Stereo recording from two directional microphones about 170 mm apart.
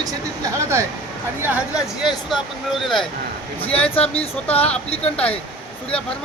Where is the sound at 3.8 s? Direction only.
35° left (ahead or behind).